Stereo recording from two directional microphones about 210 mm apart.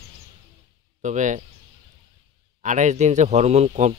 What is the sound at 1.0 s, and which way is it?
Speech, 35° right (ahead or behind).